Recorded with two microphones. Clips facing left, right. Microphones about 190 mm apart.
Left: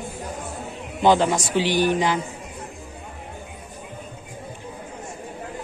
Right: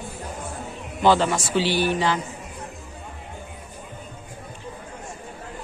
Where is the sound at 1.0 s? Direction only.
15° left (ahead or behind).